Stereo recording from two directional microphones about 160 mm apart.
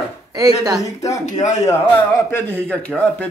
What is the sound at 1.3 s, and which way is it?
Speech, 50° left (ahead or behind).